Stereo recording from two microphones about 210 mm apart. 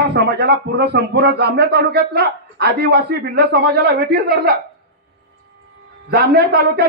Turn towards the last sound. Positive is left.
turn(degrees=-50)  # may be behind; listen again after turning